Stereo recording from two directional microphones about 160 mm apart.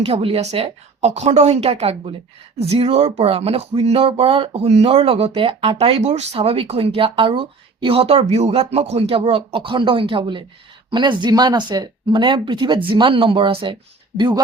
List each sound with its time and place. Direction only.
0.0 s speech: 35° right (ahead or behind)